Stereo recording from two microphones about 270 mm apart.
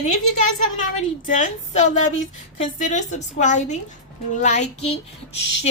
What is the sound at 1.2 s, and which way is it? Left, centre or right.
Speech, left.